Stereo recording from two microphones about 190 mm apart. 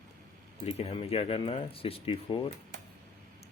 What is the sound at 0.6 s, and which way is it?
Speech, 35° left (ahead or behind).